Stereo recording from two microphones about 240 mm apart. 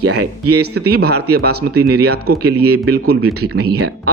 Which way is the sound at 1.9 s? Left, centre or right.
Right.